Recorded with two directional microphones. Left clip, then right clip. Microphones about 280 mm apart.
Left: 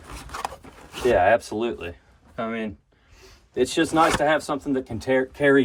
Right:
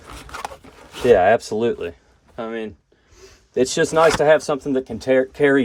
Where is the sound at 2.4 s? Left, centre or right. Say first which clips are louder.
Right 1 dB; centre.